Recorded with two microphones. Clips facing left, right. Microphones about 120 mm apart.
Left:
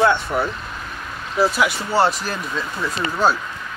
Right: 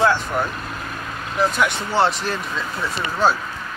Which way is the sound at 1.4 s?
5° left (ahead or behind).